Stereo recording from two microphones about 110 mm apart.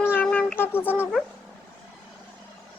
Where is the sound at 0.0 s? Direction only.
20° left (ahead or behind).